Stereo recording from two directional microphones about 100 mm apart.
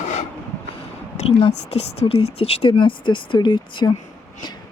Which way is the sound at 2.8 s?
55° left (ahead or behind).